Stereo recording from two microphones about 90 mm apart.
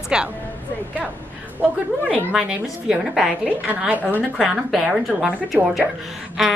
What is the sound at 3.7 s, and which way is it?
Speech, 15° right (ahead or behind).